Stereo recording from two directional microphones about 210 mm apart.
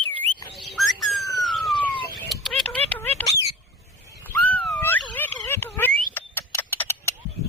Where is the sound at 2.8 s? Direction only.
10° left (ahead or behind).